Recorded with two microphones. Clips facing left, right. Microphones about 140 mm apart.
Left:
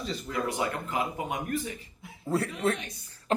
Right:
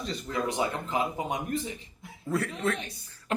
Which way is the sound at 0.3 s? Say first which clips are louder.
Right 1 dB; 20° right (ahead or behind).